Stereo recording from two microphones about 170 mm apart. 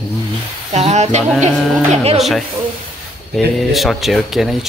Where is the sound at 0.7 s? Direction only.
40° right (ahead or behind).